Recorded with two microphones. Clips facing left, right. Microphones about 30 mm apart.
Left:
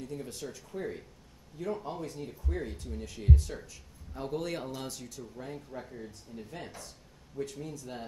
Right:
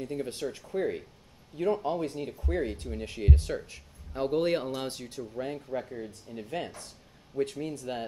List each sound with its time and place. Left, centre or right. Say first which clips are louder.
0.0 s speech: right 6 dB; right
6.0 s speech: right 5 dB; right